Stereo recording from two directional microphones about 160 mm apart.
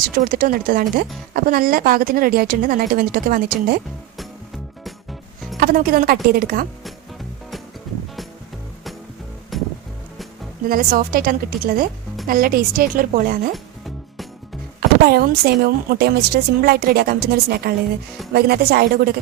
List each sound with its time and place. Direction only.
0.2 s speech: 60° right (ahead or behind)
5.5 s a woman's voice: 65° right (ahead or behind)
9.5 s music: centre (ahead or behind)
10.7 s speech: 65° right (ahead or behind)
14.8 s a woman's voice: 70° right (ahead or behind)